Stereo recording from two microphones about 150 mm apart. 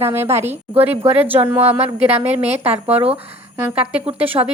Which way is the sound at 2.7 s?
10° right (ahead or behind).